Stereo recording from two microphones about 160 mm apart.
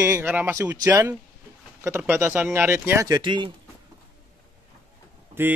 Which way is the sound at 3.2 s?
30° right (ahead or behind).